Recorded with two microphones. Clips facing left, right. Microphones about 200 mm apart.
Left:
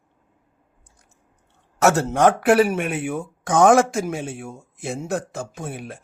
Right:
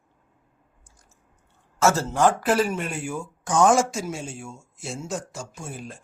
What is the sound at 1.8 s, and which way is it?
Speech, 65° left (ahead or behind).